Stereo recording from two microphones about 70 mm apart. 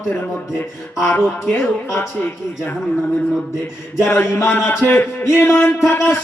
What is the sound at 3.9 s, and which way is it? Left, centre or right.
Music, left.